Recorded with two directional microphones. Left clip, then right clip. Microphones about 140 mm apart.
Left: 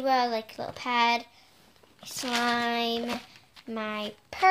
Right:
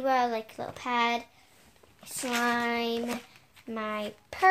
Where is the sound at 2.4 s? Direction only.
10° right (ahead or behind).